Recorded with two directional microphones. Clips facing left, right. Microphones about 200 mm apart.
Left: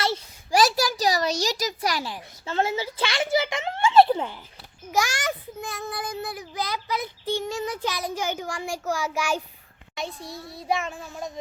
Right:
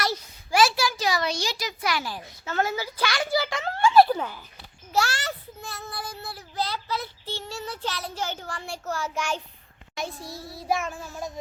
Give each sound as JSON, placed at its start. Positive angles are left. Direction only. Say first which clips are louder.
{"t": 0.0, "sound": "a sound", "louder": "left 2 dB", "side_deg": 30}
{"t": 2.5, "sound": "a child's voice", "louder": "left 2 dB", "side_deg": 25}
{"t": 4.9, "sound": "a child's voice", "louder": "left 1 dB", "side_deg": 15}
{"t": 9.9, "sound": "child singing", "louder": "even", "side_deg": 0}